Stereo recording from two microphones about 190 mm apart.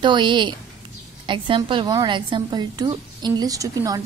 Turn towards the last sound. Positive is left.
turn(degrees=-20)  # may be behind; listen again after turning